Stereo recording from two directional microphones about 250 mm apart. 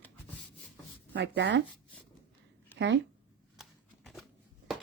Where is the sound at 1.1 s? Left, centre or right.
Right.